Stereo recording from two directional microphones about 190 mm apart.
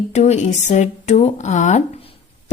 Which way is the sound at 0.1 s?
35° left (ahead or behind).